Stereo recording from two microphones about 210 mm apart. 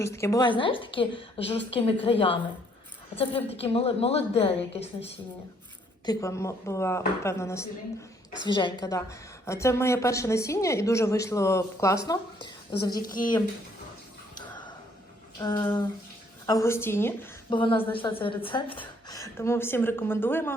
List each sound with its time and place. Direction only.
0.0 s a woman's voice: 15° left (ahead or behind)
6.1 s a woman's voice: 15° left (ahead or behind)
13.0 s speech: 40° left (ahead or behind)
15.4 s a woman's voice: 20° left (ahead or behind)
17.5 s a woman's voice: 25° left (ahead or behind)